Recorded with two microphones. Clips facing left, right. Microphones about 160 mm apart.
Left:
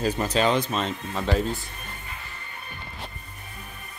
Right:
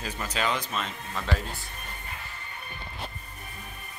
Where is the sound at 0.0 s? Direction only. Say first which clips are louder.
Left 8 dB; 30° left (ahead or behind).